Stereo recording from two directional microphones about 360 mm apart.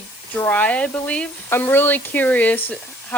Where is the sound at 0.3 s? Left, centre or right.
Centre.